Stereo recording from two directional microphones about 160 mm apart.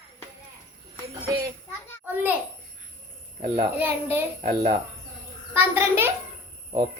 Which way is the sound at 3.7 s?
15° right (ahead or behind).